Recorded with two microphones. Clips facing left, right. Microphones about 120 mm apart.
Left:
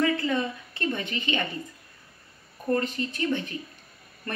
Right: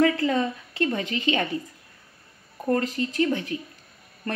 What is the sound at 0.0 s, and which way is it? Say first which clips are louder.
Speech: right 4 dB; 90° right.